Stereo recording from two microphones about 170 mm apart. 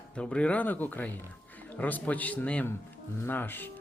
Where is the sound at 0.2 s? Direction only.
5° left (ahead or behind).